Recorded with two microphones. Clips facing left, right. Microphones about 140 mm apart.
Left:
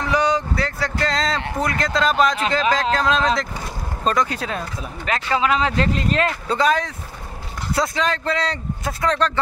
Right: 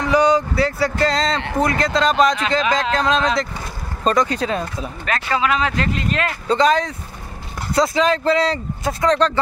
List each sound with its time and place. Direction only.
0.0 s speech: centre (ahead or behind)
5.0 s speech: 20° left (ahead or behind); by 6.3 s 35° left (ahead or behind)
6.5 s speech: 5° left (ahead or behind)